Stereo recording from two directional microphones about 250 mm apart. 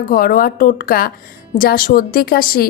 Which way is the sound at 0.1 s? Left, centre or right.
Left.